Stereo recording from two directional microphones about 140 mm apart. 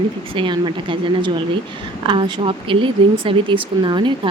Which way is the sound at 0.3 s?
35° right (ahead or behind).